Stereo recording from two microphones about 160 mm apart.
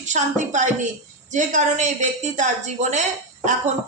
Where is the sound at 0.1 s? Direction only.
50° right (ahead or behind).